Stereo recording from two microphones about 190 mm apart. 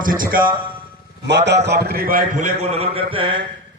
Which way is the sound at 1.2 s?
65° right (ahead or behind).